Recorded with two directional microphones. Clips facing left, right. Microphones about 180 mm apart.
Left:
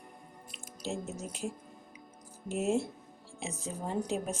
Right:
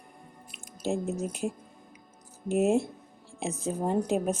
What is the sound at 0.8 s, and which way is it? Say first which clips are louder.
Speech: right 8 dB; 55° right (ahead or behind).